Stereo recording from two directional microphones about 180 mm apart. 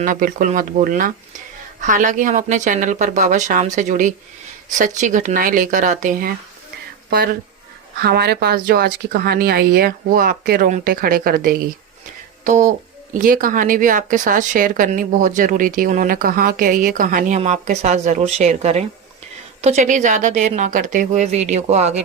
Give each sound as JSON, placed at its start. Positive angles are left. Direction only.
{"t": 0.0, "sound": "speech", "side_deg": -50}
{"t": 12.5, "sound": "a woman's voice", "side_deg": -45}